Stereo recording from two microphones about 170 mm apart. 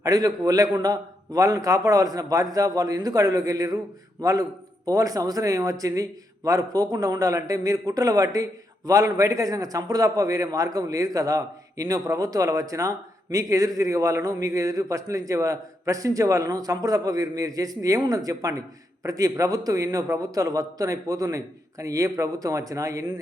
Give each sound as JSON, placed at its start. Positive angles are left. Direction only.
{"t": 0.0, "sound": "a man's voice", "side_deg": -20}